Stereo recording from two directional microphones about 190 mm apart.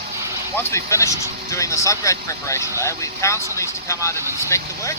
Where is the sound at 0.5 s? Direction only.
15° left (ahead or behind).